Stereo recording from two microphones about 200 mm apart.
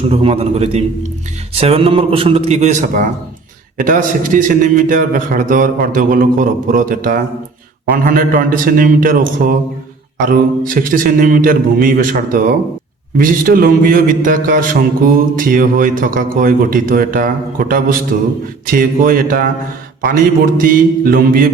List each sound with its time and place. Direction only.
0.1 s a man's voice: 30° right (ahead or behind)
10.2 s a man's voice: 45° right (ahead or behind)